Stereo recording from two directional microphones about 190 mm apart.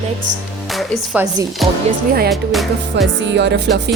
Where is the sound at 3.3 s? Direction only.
65° right (ahead or behind).